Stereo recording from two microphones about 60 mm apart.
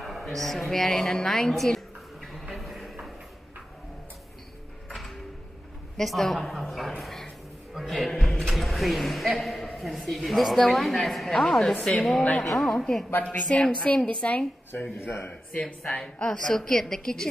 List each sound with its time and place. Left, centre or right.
0.0 s a woman's voice: centre
2.3 s a sound: centre
4.8 s music: centre
5.9 s a sound: centre
7.7 s a woman's voice: centre
13.3 s a woman's voice: left
14.7 s speech: left
16.2 s a woman's voice: centre